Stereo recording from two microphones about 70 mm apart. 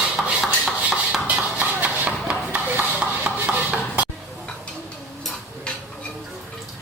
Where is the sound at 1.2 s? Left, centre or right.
Centre.